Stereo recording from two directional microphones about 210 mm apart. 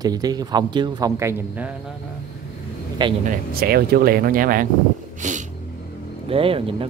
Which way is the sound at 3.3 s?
45° right (ahead or behind).